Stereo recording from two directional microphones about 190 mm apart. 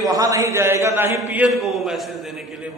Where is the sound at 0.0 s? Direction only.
20° right (ahead or behind); by 2.1 s centre (ahead or behind).